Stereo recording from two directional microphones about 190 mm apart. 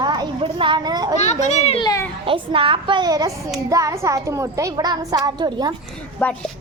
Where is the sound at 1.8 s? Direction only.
15° left (ahead or behind).